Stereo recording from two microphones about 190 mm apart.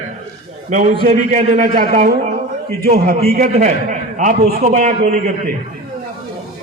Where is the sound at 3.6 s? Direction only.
40° right (ahead or behind).